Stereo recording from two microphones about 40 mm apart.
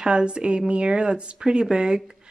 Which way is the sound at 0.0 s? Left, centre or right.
Right.